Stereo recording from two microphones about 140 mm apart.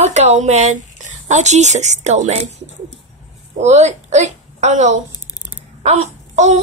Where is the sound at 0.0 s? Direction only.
50° right (ahead or behind).